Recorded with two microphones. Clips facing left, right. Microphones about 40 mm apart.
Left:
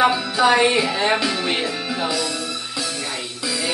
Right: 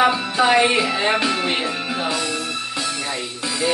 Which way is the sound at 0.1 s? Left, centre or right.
Right.